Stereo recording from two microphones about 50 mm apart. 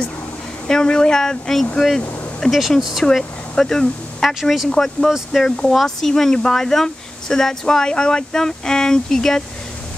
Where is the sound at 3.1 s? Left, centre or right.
Centre.